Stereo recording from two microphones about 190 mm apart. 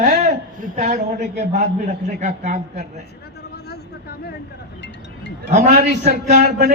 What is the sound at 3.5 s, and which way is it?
Vehicle, 55° left (ahead or behind).